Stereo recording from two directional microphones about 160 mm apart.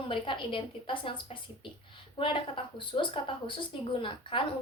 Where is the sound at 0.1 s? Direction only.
30° left (ahead or behind).